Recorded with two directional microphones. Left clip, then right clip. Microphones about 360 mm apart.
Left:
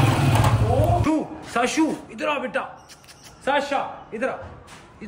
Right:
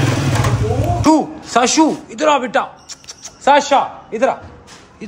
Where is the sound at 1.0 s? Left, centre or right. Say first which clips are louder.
Right 10 dB; centre.